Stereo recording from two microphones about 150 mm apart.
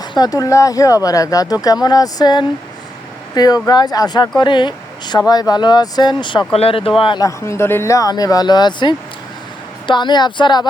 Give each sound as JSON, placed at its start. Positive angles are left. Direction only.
{"t": 0.0, "sound": "speech", "side_deg": 25}
{"t": 7.3, "sound": "speech", "side_deg": 20}